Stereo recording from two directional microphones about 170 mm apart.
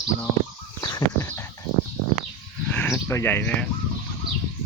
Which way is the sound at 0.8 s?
20° left (ahead or behind).